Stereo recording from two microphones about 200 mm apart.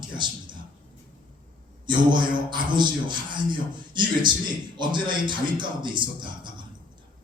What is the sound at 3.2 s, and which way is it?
A man's voice, 25° right (ahead or behind).